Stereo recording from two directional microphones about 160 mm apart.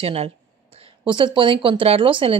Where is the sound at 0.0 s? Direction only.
40° right (ahead or behind).